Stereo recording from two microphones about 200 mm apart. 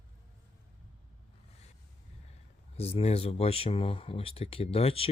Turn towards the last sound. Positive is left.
turn(degrees=30)  # may be behind; listen again after turning